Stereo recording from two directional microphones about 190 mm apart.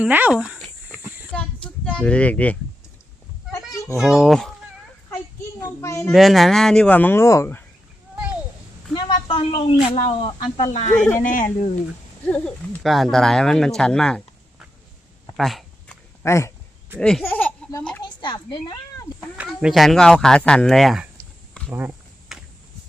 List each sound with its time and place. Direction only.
0.0 s a sound: 10° right (ahead or behind)
1.3 s a sound: 5° left (ahead or behind)
3.9 s speech: centre (ahead or behind)
5.6 s a child's voice: 15° left (ahead or behind)
6.1 s speech: centre (ahead or behind)
8.9 s a woman's voice: 25° left (ahead or behind); by 11.5 s 45° left (ahead or behind)
12.2 s speech: 5° left (ahead or behind)
15.4 s a sound: centre (ahead or behind)
16.2 s speech: 15° left (ahead or behind)
17.0 s speech: 5° left (ahead or behind)
18.2 s speech: 25° left (ahead or behind)
19.4 s speech: 5° right (ahead or behind)
21.7 s a sound: 10° right (ahead or behind)